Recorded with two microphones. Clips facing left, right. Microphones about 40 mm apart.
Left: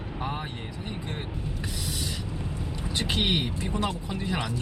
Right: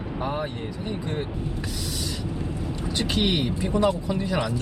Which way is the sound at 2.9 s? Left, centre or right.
Left.